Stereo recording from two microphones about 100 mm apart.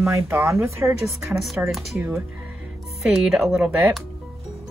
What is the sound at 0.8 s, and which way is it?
Speech, centre (ahead or behind).